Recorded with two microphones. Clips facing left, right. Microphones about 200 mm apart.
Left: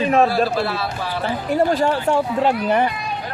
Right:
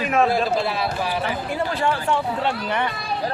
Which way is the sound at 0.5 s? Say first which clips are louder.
Left 1 dB; 15° right (ahead or behind).